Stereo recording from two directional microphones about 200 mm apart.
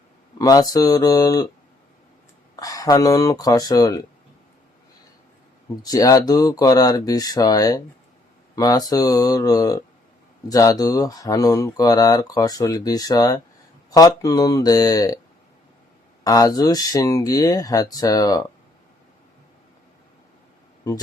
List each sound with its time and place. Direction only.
0.3 s speech: 20° left (ahead or behind)
2.6 s speech: 15° left (ahead or behind)
5.8 s speech: 15° left (ahead or behind)
16.2 s speech: 20° left (ahead or behind)